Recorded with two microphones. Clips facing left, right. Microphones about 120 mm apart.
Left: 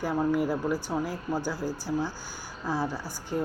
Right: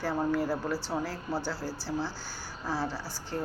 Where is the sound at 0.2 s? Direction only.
15° left (ahead or behind).